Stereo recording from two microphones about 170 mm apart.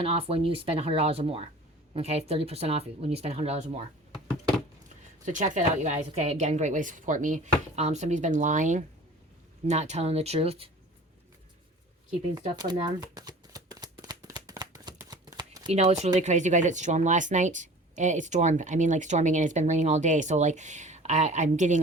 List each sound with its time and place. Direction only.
0.0 s speech: 35° right (ahead or behind)
5.2 s speech: 45° right (ahead or behind)
12.7 s shuffling cards: 25° right (ahead or behind)
15.7 s speech: 40° right (ahead or behind)